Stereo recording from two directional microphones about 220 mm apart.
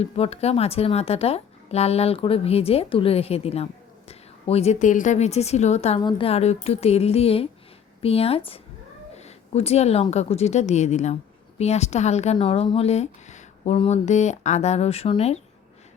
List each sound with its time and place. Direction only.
0.0 s a woman's voice: 30° left (ahead or behind)